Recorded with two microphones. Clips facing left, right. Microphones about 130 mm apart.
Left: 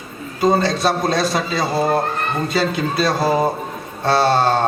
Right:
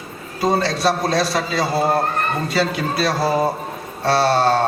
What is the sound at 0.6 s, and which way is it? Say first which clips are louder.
A man's voice: left 1 dB; 20° left (ahead or behind).